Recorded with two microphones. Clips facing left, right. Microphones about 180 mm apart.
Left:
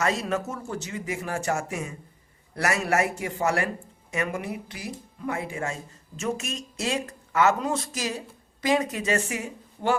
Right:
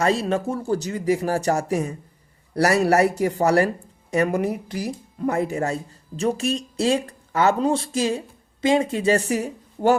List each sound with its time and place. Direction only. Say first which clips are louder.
0.0 s speech: right 5 dB; 30° right (ahead or behind)